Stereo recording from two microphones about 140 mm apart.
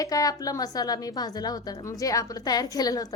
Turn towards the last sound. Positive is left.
turn(degrees=25)  # may be behind; listen again after turning